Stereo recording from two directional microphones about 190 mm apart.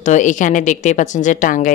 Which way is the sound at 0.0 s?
40° left (ahead or behind).